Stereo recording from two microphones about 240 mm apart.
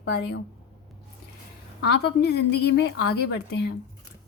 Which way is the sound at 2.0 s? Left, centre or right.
Left.